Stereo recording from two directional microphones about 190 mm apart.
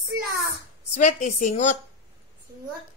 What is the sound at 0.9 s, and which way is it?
Speech, 35° left (ahead or behind).